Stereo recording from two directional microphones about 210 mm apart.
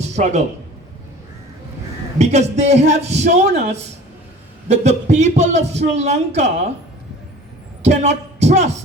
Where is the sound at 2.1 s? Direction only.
30° right (ahead or behind).